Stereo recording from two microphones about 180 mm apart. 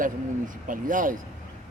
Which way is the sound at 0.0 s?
50° right (ahead or behind).